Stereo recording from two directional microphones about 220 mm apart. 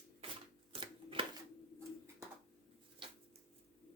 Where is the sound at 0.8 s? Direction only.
25° right (ahead or behind).